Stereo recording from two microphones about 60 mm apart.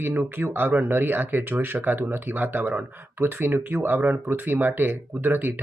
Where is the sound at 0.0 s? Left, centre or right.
Right.